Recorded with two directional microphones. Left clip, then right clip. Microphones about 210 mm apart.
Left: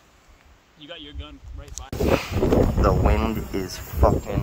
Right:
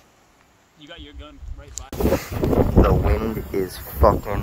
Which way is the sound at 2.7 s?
5° left (ahead or behind).